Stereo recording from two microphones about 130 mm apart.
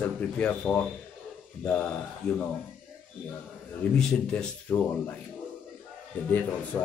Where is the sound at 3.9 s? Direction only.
5° left (ahead or behind).